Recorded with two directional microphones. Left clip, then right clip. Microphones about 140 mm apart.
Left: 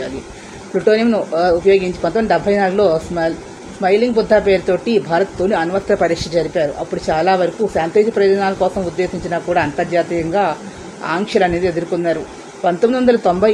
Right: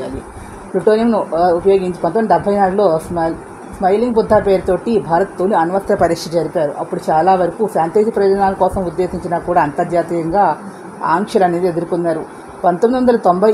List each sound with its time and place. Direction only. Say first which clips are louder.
0.8 s a woman's voice: right 1 dB; 25° right (ahead or behind)